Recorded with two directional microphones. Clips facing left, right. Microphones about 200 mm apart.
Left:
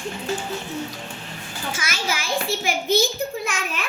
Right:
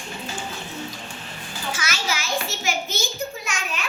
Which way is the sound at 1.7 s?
50° left (ahead or behind).